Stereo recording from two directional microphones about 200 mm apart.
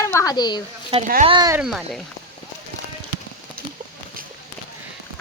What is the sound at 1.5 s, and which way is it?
Speech, 5° right (ahead or behind).